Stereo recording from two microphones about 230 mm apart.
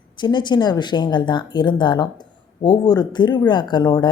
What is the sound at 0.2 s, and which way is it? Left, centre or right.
Speech, centre.